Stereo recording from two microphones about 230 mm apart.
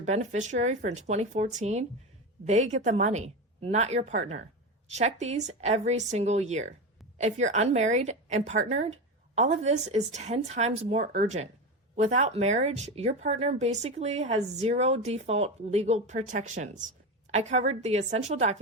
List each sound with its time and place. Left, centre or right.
0.0 s a woman's voice: right